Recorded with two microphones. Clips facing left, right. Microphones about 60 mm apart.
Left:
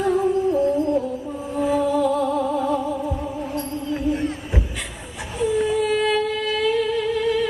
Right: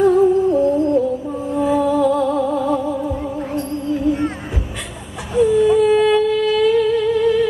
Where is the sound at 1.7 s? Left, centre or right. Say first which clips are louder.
Right 3 dB; right.